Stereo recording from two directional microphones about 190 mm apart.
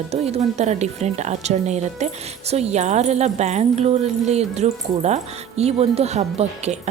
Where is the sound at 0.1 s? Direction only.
35° right (ahead or behind).